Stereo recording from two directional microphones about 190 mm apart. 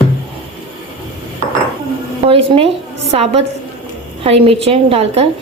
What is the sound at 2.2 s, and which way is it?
A woman's voice, 30° right (ahead or behind).